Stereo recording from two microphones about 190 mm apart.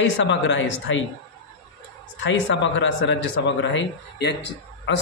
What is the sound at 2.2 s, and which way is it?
A man's voice, 75° left (ahead or behind).